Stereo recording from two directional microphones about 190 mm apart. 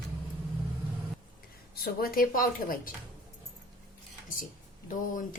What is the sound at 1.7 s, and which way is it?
Speech, 50° left (ahead or behind).